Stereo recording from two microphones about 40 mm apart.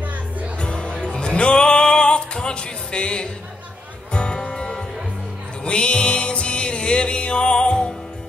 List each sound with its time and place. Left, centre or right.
0.6 s music: left